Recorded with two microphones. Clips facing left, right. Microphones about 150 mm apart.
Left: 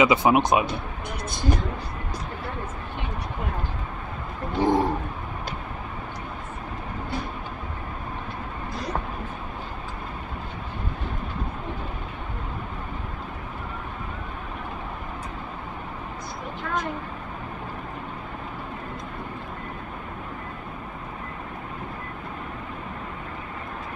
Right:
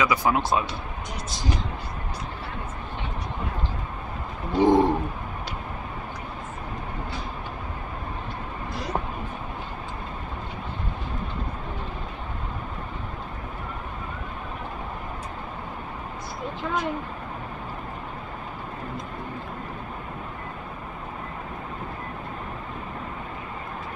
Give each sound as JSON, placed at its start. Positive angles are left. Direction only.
{"t": 0.0, "sound": "speech", "side_deg": 20}
{"t": 1.3, "sound": "speech", "side_deg": 55}
{"t": 4.6, "sound": "bird", "side_deg": -20}